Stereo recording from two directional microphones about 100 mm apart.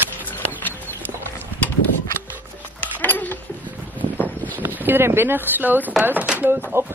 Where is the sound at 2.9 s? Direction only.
15° left (ahead or behind).